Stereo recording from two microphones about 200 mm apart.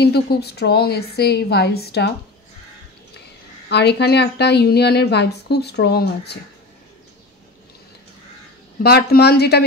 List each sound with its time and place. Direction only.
0.0 s a woman's voice: 55° left (ahead or behind)
3.6 s a woman's voice: 55° left (ahead or behind)
8.8 s a woman's voice: 50° left (ahead or behind)